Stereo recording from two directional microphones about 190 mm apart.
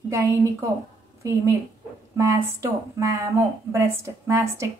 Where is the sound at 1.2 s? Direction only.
15° right (ahead or behind).